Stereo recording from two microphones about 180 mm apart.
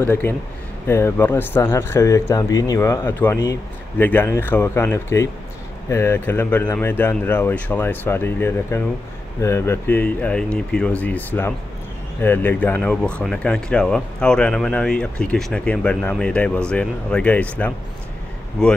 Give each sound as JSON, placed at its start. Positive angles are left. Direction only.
{"t": 0.0, "sound": "speech", "side_deg": 15}